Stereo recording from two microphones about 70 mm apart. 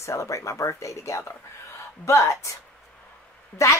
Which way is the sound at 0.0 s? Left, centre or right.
Left.